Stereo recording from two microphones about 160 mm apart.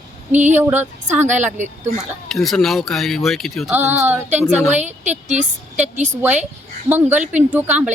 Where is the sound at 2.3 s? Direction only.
Centre (ahead or behind).